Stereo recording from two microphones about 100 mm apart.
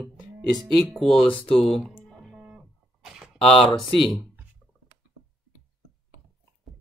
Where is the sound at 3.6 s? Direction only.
55° left (ahead or behind).